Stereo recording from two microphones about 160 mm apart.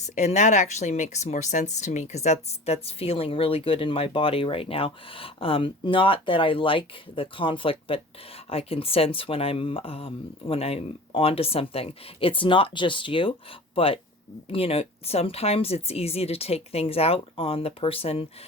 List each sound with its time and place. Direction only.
0.0 s speech: 45° left (ahead or behind)